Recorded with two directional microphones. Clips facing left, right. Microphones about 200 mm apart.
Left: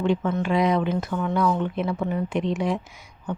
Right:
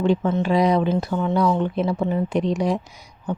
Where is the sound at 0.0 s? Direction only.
35° right (ahead or behind).